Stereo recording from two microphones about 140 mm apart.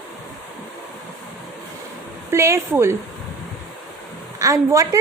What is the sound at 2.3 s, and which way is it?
Speech, 20° right (ahead or behind).